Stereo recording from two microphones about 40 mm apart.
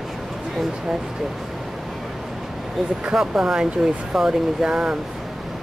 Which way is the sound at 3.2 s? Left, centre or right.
Centre.